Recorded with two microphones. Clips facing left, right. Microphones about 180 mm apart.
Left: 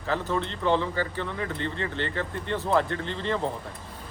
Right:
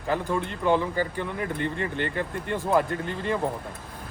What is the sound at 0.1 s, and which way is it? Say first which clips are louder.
Speech: right 1 dB; 10° right (ahead or behind).